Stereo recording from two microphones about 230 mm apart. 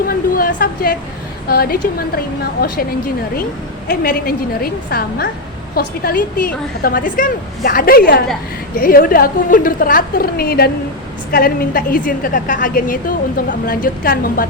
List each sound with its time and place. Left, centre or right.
0.1 s a sound: left
1.5 s a woman's voice: left
3.8 s a woman's voice: left